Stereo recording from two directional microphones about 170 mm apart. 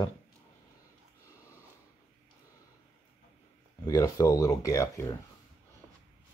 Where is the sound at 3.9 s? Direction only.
20° left (ahead or behind).